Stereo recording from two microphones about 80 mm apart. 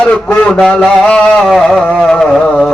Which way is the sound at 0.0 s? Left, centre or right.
Centre.